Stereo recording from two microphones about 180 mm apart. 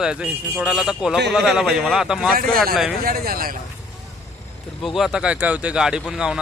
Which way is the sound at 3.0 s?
55° right (ahead or behind).